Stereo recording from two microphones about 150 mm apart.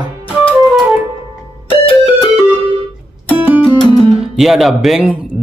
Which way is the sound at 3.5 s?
10° right (ahead or behind).